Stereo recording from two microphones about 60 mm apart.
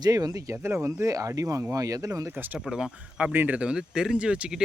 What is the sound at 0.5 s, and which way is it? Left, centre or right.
Speech, right.